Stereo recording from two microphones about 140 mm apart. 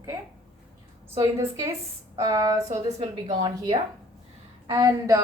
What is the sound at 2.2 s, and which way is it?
A woman's voice, 25° right (ahead or behind).